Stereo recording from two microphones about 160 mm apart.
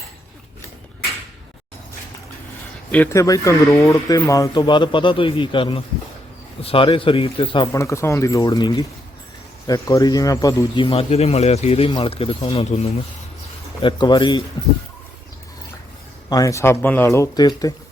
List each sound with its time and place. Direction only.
2.9 s speech: 15° left (ahead or behind); by 7.7 s 30° left (ahead or behind)
7.7 s speech: 20° left (ahead or behind)
16.3 s speech: 20° left (ahead or behind)